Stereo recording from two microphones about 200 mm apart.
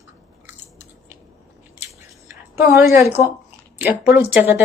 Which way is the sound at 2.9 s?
15° right (ahead or behind).